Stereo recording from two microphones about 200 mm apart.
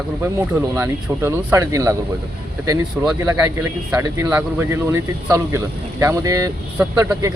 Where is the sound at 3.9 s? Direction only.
15° right (ahead or behind).